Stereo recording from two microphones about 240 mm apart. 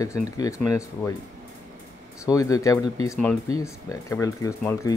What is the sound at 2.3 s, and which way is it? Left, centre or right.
Speech, centre.